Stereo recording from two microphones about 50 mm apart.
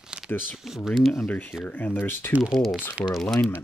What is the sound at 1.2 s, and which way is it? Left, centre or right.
Speech, left.